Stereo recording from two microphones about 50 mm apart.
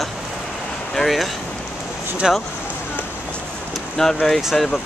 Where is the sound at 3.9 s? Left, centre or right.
Centre.